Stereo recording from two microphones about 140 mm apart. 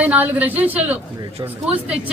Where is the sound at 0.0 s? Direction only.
10° right (ahead or behind).